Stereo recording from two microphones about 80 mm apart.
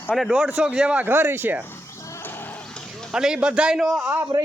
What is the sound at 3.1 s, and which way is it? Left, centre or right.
Speech, centre.